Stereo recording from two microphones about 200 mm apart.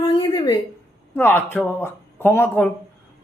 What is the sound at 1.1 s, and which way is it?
Speech, 10° left (ahead or behind).